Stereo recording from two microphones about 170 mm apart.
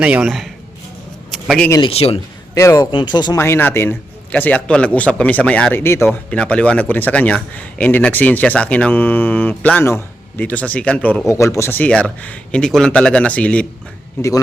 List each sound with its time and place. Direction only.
0.0 s speech: 5° right (ahead or behind)
1.3 s a sound: centre (ahead or behind)
1.8 s a man's voice: 35° left (ahead or behind)
2.6 s speech: 20° left (ahead or behind)
3.3 s a man's voice: 15° left (ahead or behind)